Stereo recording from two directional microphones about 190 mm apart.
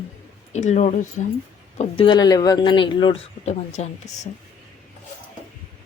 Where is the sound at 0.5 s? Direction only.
40° left (ahead or behind).